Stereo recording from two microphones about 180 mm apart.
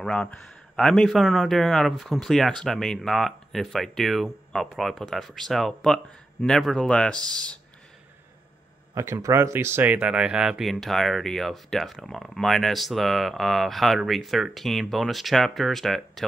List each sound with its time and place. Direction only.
0.0 s speech: 5° left (ahead or behind)
8.9 s speech: 15° right (ahead or behind); by 16.3 s centre (ahead or behind)